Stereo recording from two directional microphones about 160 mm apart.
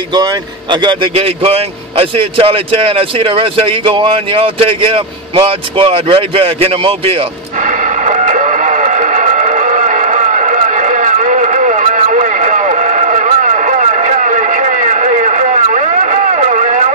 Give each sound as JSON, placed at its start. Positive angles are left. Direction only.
{"t": 0.1, "sound": "speech", "side_deg": -25}
{"t": 7.6, "sound": "music", "side_deg": -50}